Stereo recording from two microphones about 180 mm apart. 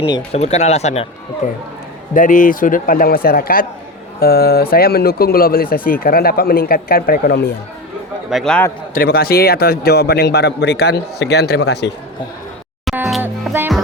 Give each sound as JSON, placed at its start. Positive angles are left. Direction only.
{"t": 0.3, "sound": "a man's voice", "side_deg": 35}
{"t": 8.3, "sound": "speech", "side_deg": 0}
{"t": 9.0, "sound": "speech", "side_deg": 55}
{"t": 13.2, "sound": "music", "side_deg": -10}